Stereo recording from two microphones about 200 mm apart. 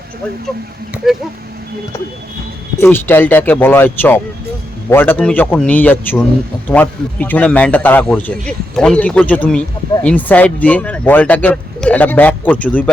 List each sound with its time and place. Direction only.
1.0 s speech: centre (ahead or behind)
2.7 s a man's voice: 10° left (ahead or behind)